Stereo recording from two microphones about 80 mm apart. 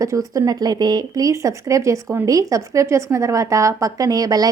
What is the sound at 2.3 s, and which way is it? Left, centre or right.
A woman's voice, right.